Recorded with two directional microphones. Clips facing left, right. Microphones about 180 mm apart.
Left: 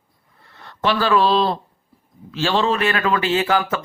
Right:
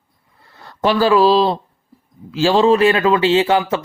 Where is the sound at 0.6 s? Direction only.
35° right (ahead or behind).